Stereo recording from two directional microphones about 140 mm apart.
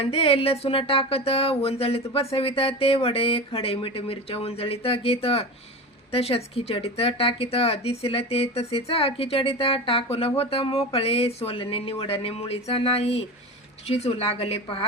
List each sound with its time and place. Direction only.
0.0 s speech: 40° left (ahead or behind)